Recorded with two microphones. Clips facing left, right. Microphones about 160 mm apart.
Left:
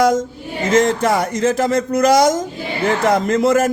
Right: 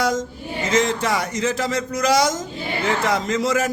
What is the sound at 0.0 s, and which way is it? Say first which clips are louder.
A man's voice: left 7 dB; 50° left (ahead or behind).